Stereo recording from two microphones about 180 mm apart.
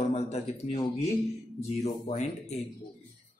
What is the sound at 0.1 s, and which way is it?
Speech, 40° left (ahead or behind).